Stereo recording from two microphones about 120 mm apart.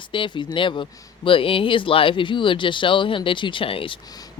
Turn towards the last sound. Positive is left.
turn(degrees=50)  # may be behind; listen again after turning